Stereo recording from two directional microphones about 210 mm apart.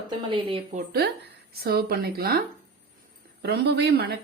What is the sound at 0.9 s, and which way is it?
Speech, 50° right (ahead or behind).